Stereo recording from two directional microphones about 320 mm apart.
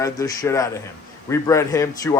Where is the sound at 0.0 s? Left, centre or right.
Centre.